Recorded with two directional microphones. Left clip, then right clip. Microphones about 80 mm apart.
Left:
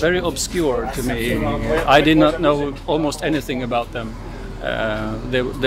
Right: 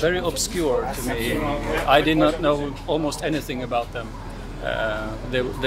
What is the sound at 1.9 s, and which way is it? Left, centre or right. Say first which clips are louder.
Speech: left 4 dB; left.